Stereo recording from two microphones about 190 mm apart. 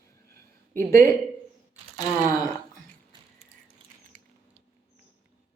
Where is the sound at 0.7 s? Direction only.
15° left (ahead or behind).